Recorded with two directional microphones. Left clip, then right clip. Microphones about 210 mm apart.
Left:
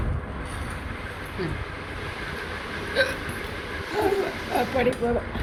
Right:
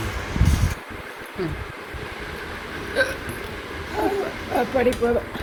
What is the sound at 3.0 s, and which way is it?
Speech, 30° right (ahead or behind).